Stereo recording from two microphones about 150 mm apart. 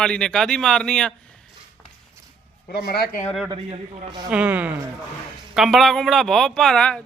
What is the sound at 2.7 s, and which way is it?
Speech, 90° left.